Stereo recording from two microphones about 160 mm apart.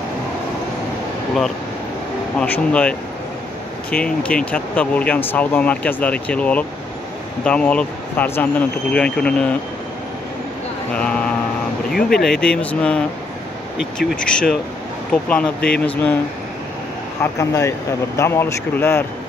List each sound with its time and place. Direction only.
2.3 s speech: 10° left (ahead or behind)
11.0 s mantra: 5° left (ahead or behind)
11.9 s speech: centre (ahead or behind)
17.2 s speech: 20° left (ahead or behind)